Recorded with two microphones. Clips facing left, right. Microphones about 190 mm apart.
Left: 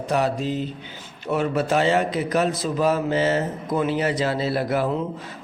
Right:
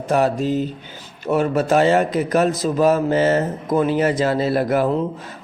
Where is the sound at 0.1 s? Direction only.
45° right (ahead or behind).